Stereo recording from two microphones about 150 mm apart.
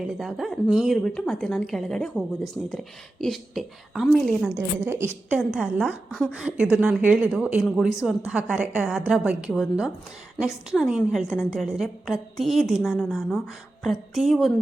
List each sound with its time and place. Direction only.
0.2 s a woman's voice: centre (ahead or behind)
4.9 s a woman's voice: 15° right (ahead or behind)
5.4 s a woman's voice: 5° right (ahead or behind)